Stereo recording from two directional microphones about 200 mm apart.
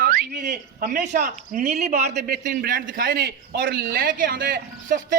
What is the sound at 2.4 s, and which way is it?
A man's voice, 45° right (ahead or behind).